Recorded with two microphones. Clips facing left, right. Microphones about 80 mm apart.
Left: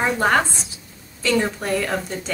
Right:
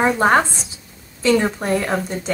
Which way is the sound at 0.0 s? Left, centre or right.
Right.